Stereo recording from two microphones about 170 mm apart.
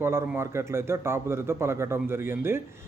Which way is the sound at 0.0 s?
15° right (ahead or behind).